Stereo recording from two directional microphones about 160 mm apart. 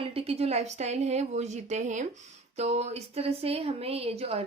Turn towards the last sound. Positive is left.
turn(degrees=-40)  # may be behind; listen again after turning